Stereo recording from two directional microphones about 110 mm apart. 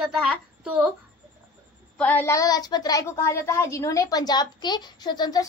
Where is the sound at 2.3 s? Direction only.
35° left (ahead or behind).